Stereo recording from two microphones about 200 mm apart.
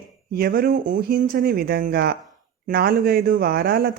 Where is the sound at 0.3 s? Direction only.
50° right (ahead or behind).